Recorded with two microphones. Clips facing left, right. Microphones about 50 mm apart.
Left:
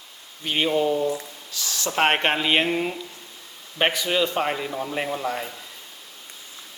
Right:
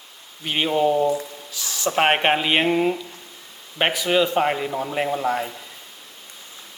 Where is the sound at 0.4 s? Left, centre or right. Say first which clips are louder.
Right 2 dB; centre.